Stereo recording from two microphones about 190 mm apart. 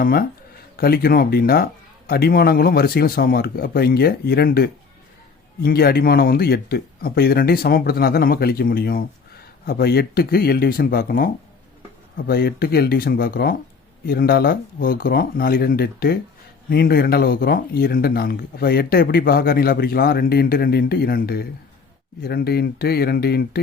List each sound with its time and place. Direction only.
0.0 s speech: 50° left (ahead or behind)